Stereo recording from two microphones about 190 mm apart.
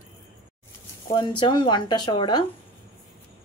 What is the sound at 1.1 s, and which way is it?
Speech, 25° left (ahead or behind).